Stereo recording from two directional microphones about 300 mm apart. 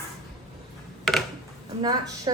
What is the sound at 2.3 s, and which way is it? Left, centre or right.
Speech, centre.